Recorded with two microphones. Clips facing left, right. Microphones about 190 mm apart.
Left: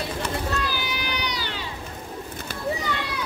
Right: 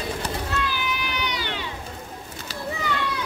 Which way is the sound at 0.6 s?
35° left (ahead or behind).